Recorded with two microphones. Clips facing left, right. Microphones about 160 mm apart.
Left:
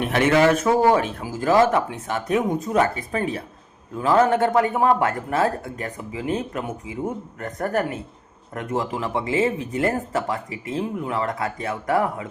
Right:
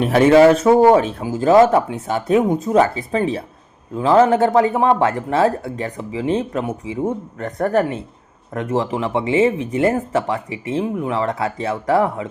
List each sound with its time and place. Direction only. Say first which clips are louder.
0.0 s speech: right 7 dB; 35° right (ahead or behind)